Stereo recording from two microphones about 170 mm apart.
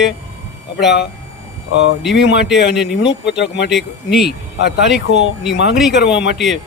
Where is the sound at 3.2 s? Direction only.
90° left.